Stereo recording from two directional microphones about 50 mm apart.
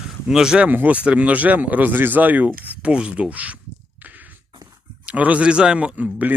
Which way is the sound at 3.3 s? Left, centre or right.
Right.